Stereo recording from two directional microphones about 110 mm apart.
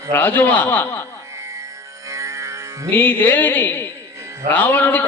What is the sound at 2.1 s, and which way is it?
Music, 30° right (ahead or behind).